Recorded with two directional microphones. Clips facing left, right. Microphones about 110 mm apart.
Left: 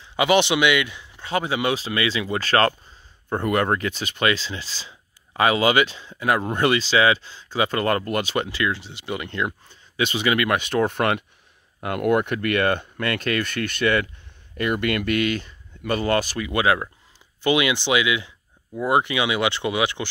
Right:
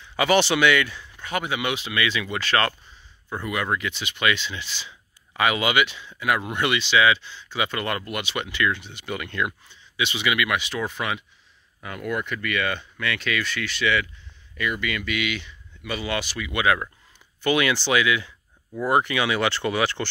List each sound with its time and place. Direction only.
0.0 s speech: 20° left (ahead or behind); by 2.7 s 35° left (ahead or behind)
3.3 s speech: 50° left (ahead or behind); by 9.5 s 25° left (ahead or behind)
9.7 s speech: 45° left (ahead or behind); by 20.1 s 15° left (ahead or behind)